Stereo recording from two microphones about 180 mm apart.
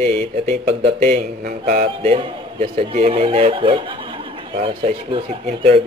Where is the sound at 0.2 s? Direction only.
35° right (ahead or behind).